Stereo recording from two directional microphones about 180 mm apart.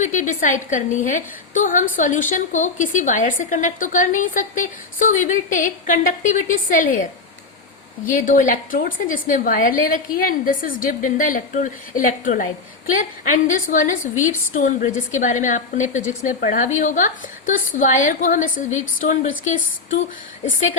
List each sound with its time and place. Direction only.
0.0 s a woman's voice: 45° left (ahead or behind)
8.1 s a woman's voice: 45° left (ahead or behind)